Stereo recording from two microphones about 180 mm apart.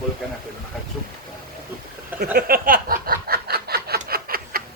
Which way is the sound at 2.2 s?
55° right (ahead or behind).